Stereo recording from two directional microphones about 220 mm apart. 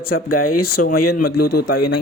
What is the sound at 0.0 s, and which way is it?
Speech, 45° left (ahead or behind).